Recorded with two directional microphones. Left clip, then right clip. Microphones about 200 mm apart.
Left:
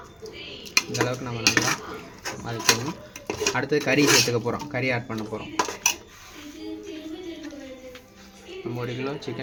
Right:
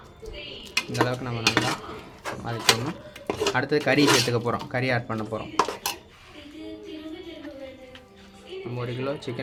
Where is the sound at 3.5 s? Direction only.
10° right (ahead or behind).